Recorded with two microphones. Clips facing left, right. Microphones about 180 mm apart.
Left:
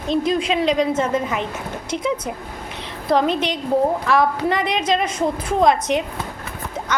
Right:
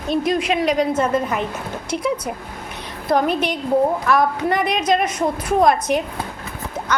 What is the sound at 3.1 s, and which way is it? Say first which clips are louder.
A woman's voice: even; 25° left (ahead or behind).